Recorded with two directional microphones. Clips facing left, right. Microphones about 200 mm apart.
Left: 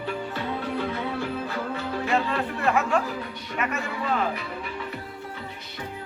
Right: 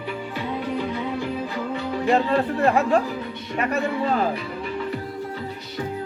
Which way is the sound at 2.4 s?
35° right (ahead or behind).